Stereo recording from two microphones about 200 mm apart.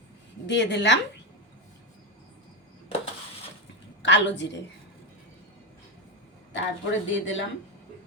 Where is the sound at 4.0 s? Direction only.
65° left (ahead or behind).